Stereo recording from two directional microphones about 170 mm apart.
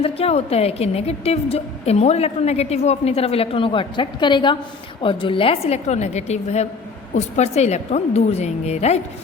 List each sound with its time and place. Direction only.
0.0 s a woman's voice: 35° left (ahead or behind)